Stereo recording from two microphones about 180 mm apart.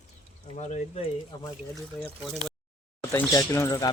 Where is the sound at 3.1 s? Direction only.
15° left (ahead or behind).